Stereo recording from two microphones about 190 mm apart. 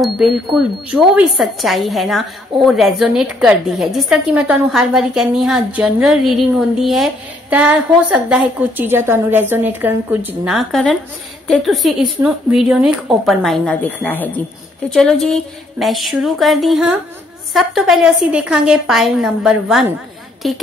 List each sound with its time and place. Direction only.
0.0 s a woman's voice: centre (ahead or behind)